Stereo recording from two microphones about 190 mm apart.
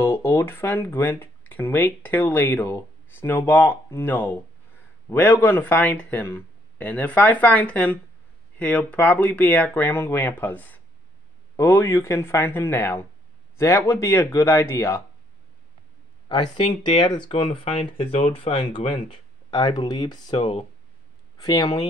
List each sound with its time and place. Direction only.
0.0 s a man's voice: 10° left (ahead or behind)
16.3 s speech: 25° left (ahead or behind)